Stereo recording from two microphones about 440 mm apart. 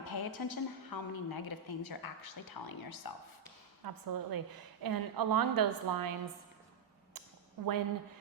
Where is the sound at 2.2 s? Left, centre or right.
Left.